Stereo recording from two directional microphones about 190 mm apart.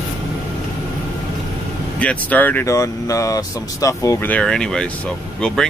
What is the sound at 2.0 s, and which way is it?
Speech, 10° left (ahead or behind).